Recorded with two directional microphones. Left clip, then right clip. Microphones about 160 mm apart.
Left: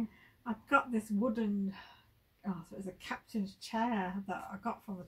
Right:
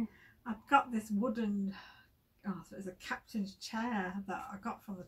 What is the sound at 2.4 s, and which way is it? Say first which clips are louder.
Speech: left 1 dB; 5° right (ahead or behind).